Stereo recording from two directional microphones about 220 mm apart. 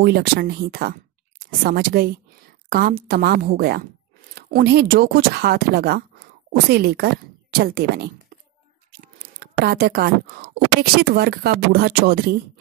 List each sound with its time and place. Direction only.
0.0 s a woman's voice: 45° right (ahead or behind)